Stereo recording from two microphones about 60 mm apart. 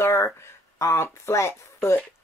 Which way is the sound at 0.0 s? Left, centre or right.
Left.